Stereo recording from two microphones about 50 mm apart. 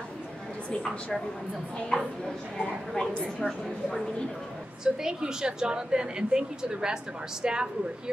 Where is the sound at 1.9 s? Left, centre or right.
Centre.